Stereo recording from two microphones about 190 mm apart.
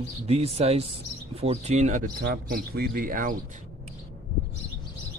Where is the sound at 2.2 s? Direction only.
55° right (ahead or behind).